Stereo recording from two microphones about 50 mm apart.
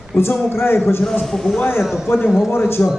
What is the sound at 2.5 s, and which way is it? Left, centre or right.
Speech, left.